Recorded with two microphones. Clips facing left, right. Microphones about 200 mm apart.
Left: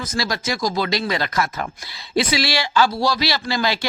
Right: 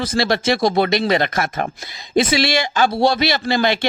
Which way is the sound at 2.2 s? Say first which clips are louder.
Right 4 dB; 25° right (ahead or behind).